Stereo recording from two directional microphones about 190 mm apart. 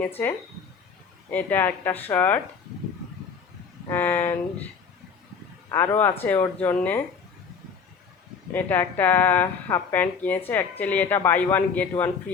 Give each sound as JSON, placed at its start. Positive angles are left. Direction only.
{"t": 1.3, "sound": "speech", "side_deg": 10}
{"t": 3.8, "sound": "a sound", "side_deg": 10}
{"t": 5.6, "sound": "speech", "side_deg": 15}
{"t": 8.5, "sound": "speech", "side_deg": 10}